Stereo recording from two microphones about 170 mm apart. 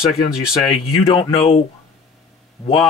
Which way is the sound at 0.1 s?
Centre (ahead or behind).